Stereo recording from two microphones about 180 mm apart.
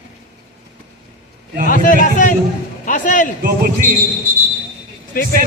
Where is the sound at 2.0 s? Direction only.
50° left (ahead or behind).